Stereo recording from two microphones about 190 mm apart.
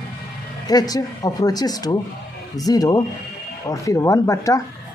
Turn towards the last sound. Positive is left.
turn(degrees=15)  # may be behind; listen again after turning